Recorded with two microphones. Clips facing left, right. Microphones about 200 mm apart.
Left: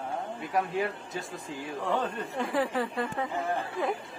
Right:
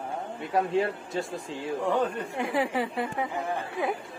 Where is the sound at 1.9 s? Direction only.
15° right (ahead or behind).